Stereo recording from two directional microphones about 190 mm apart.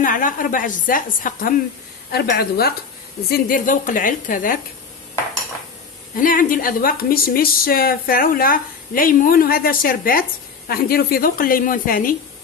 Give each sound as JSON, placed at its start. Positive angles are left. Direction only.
{"t": 0.0, "sound": "a woman's voice", "side_deg": 45}
{"t": 6.1, "sound": "a woman's voice", "side_deg": 45}